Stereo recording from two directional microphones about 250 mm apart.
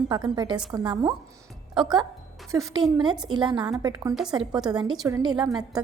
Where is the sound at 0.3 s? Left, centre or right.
Centre.